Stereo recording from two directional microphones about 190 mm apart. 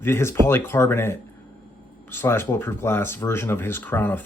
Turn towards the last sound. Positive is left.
turn(degrees=10)  # may be behind; listen again after turning